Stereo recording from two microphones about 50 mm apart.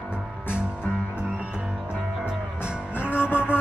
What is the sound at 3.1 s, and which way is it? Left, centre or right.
Music, left.